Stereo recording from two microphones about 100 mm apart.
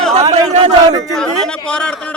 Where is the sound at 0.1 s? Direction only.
85° right.